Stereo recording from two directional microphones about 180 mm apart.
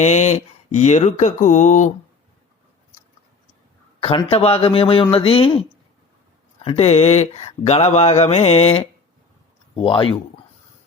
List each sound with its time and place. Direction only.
0.0 s speech: 40° left (ahead or behind)
4.0 s speech: 30° left (ahead or behind)